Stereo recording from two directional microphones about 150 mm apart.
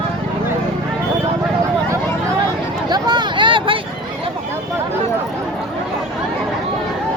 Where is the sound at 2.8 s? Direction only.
30° right (ahead or behind).